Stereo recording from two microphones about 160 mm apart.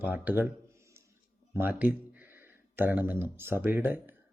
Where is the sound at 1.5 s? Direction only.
15° right (ahead or behind).